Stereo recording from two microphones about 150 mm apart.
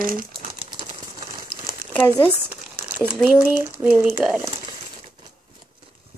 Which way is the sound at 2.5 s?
10° right (ahead or behind).